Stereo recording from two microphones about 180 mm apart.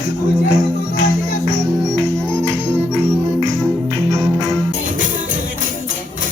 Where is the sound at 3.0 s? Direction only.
15° right (ahead or behind).